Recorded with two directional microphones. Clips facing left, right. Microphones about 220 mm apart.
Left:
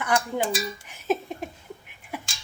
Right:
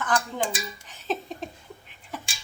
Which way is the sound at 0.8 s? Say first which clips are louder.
Left 2 dB; 10° left (ahead or behind).